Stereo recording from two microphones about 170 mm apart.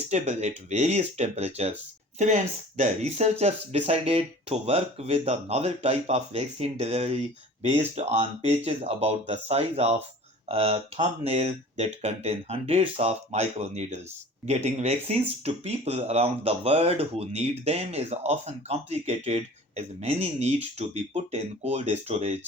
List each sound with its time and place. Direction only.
0.1 s speech: 40° right (ahead or behind)